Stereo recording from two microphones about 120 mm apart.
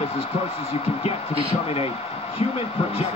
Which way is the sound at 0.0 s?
55° left (ahead or behind).